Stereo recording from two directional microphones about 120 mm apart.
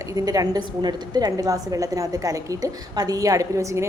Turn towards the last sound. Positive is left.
turn(degrees=-25)  # may be behind; listen again after turning